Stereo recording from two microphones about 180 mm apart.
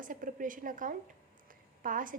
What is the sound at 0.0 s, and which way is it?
A woman's voice, 50° right (ahead or behind).